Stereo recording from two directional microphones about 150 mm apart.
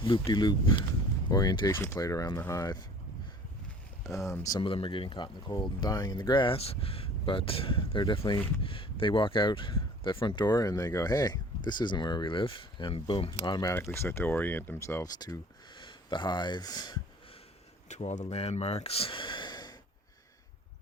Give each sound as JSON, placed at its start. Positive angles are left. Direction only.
{"t": 0.0, "sound": "speech", "side_deg": 35}
{"t": 4.2, "sound": "speech", "side_deg": 20}
{"t": 4.6, "sound": "speech", "side_deg": 35}
{"t": 17.8, "sound": "speech", "side_deg": 50}